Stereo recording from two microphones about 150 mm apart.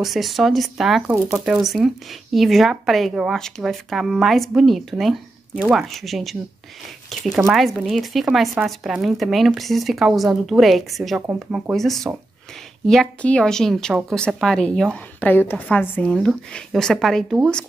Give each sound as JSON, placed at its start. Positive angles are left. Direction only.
{"t": 0.0, "sound": "speech", "side_deg": 0}
{"t": 1.0, "sound": "speech", "side_deg": -20}
{"t": 1.4, "sound": "speech", "side_deg": 0}